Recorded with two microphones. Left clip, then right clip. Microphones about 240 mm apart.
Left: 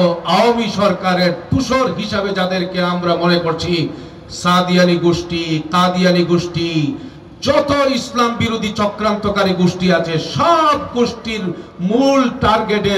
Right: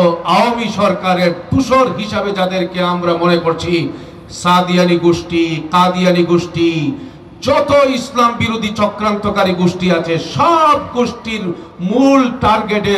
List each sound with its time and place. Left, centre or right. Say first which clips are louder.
0.0 s a man's voice: right 2 dB; centre